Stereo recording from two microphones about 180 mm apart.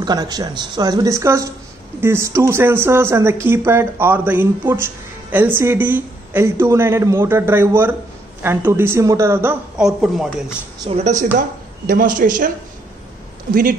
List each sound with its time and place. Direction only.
0.0 s a man's voice: 20° right (ahead or behind); by 10.3 s centre (ahead or behind)
11.0 s speech: 40° right (ahead or behind)
13.5 s speech: 50° right (ahead or behind)